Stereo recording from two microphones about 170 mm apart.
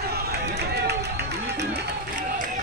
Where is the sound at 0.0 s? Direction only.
70° right (ahead or behind).